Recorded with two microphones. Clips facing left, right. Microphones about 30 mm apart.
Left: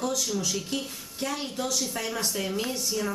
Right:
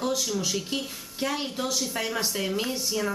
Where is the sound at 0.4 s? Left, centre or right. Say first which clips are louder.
Right 1 dB; centre.